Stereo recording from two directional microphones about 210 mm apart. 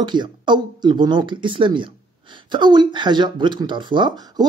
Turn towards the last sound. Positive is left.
turn(degrees=-20)  # may be behind; listen again after turning